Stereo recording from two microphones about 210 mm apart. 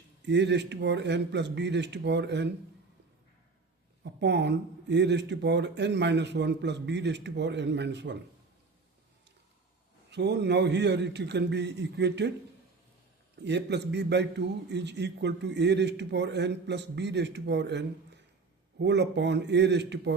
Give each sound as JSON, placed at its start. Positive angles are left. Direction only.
{"t": 0.2, "sound": "a man's voice", "side_deg": -55}
{"t": 4.0, "sound": "a man's voice", "side_deg": -55}
{"t": 10.1, "sound": "a man's voice", "side_deg": -55}
{"t": 13.4, "sound": "a man's voice", "side_deg": -55}